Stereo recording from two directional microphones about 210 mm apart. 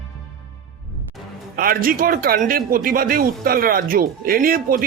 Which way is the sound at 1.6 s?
45° right (ahead or behind).